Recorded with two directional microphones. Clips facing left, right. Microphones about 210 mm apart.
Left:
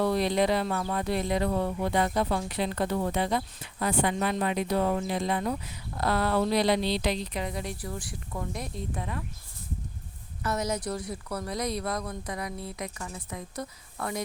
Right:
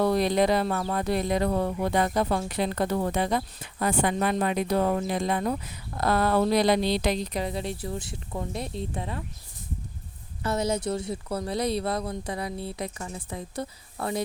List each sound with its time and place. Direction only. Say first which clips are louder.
0.0 s speech: right 3 dB; 45° right (ahead or behind)
7.4 s speech: right 3 dB; 30° right (ahead or behind)
10.4 s speech: right 3 dB; 30° right (ahead or behind)